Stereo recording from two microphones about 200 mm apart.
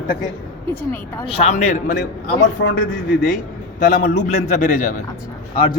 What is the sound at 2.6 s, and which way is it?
Speech, 65° left (ahead or behind).